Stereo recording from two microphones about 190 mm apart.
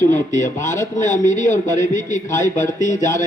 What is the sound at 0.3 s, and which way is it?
A man's voice, 40° left (ahead or behind).